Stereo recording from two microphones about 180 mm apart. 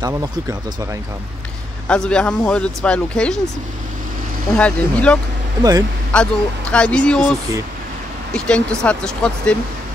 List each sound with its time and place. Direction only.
0.0 s speech: 20° right (ahead or behind)
1.9 s speech: 5° left (ahead or behind)
4.6 s speech: 5° left (ahead or behind)
5.6 s speech: 20° right (ahead or behind)
6.7 s speech: 5° left (ahead or behind)